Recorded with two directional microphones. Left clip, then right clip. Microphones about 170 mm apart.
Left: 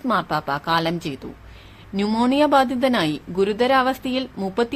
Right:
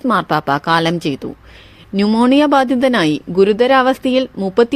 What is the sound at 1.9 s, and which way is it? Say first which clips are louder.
Speech: right 6 dB; 30° right (ahead or behind).